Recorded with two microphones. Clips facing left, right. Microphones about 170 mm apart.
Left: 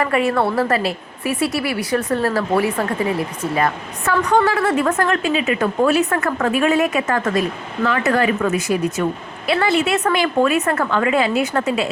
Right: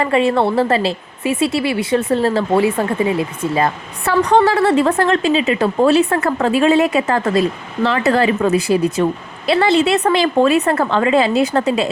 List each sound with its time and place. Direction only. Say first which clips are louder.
0.0 s a woman's voice: right 3 dB; 25° right (ahead or behind)